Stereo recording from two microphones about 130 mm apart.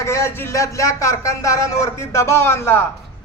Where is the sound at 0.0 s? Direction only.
20° left (ahead or behind).